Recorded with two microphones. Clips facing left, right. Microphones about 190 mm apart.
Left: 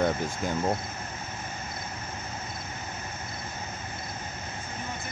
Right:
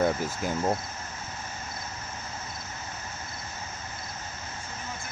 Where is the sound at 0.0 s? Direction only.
5° right (ahead or behind).